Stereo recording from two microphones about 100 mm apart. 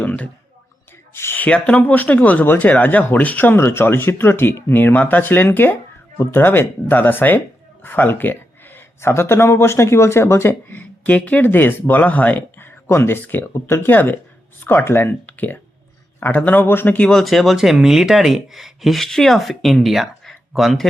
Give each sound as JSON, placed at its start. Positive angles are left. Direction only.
{"t": 0.0, "sound": "a sound", "side_deg": 15}
{"t": 1.1, "sound": "a man's voice", "side_deg": 20}
{"t": 17.1, "sound": "speech", "side_deg": 0}